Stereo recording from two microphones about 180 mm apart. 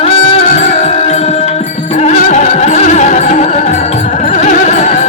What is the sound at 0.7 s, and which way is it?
Music, 40° left (ahead or behind).